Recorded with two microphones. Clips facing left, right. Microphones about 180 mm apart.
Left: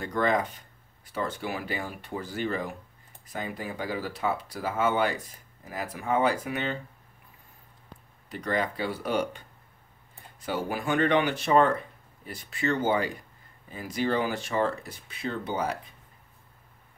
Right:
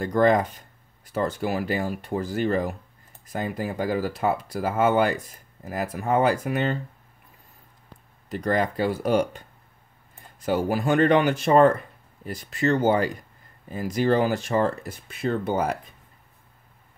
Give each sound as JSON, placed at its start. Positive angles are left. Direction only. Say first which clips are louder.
{"t": 0.0, "sound": "speech", "louder": "right 6 dB", "side_deg": -45}
{"t": 8.3, "sound": "speech", "louder": "right 5 dB", "side_deg": -45}
{"t": 10.4, "sound": "speech", "louder": "right 7 dB", "side_deg": -45}